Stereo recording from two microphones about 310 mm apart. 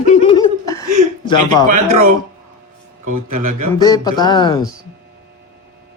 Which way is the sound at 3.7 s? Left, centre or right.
Centre.